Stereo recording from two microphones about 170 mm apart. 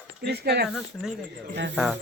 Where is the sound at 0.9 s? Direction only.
5° left (ahead or behind).